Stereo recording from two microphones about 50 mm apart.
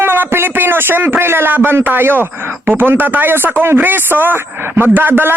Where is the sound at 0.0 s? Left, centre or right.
Right.